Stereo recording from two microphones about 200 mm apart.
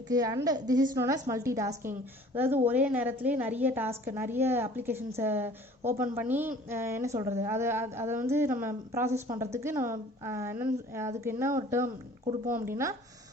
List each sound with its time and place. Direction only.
0.1 s a woman's voice: 20° right (ahead or behind)